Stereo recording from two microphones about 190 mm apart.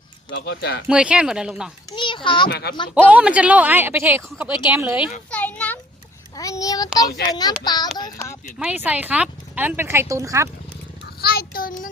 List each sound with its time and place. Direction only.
0.3 s speech: 65° left (ahead or behind)
0.9 s speech: 5° right (ahead or behind)
1.9 s a child's voice: 25° left (ahead or behind)
2.5 s speech: 55° left (ahead or behind)
3.1 s a woman's voice: 5° right (ahead or behind)
5.3 s a sound: 10° left (ahead or behind)
6.3 s a child's voice: 15° left (ahead or behind)
8.5 s a woman's voice: 5° right (ahead or behind)
11.2 s child singing: 55° left (ahead or behind)